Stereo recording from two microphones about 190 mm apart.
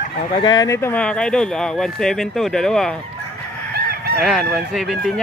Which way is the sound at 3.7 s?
55° right (ahead or behind).